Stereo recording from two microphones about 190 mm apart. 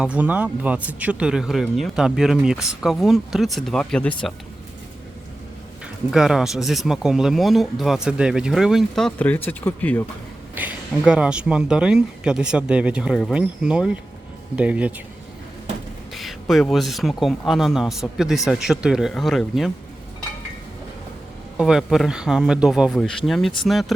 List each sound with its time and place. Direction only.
0.0 s speech: 5° right (ahead or behind)
5.8 s speech: 5° right (ahead or behind)
10.5 s speech: 10° right (ahead or behind)
16.1 s speech: centre (ahead or behind)
21.6 s speech: 5° right (ahead or behind)